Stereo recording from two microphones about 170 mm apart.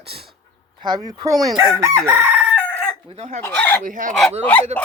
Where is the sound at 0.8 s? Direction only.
25° right (ahead or behind).